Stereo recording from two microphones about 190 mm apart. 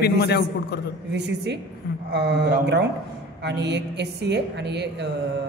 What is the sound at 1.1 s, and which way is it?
A woman's voice, 65° right (ahead or behind).